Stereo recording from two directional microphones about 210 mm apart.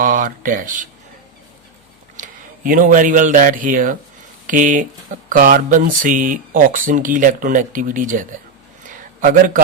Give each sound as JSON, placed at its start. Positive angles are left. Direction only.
{"t": 0.0, "sound": "speech", "side_deg": -40}
{"t": 2.1, "sound": "speech", "side_deg": -40}
{"t": 8.9, "sound": "a sound", "side_deg": -40}